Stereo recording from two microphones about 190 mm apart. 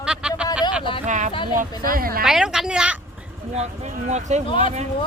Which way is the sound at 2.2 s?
5° right (ahead or behind).